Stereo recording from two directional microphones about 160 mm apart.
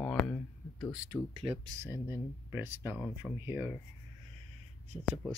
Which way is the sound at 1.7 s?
15° right (ahead or behind).